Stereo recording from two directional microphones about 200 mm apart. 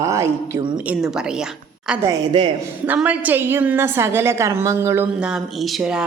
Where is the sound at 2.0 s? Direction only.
20° right (ahead or behind).